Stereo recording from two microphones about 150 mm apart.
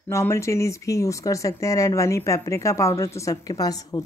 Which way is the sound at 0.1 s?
20° left (ahead or behind).